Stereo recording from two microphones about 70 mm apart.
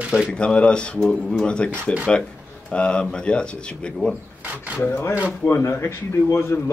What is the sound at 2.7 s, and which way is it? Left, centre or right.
Speech, centre.